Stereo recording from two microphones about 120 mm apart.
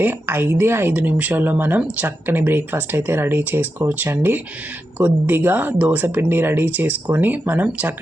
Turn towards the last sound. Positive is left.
turn(degrees=-15)  # may be behind; listen again after turning